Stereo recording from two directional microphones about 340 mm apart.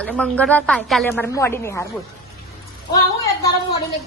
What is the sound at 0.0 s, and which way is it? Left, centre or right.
A woman's voice, centre.